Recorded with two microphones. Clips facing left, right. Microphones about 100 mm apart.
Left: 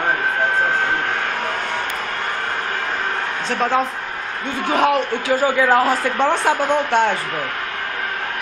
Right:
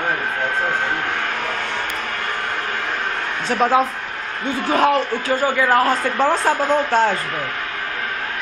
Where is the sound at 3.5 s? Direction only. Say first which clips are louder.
Right 3 dB; 5° right (ahead or behind).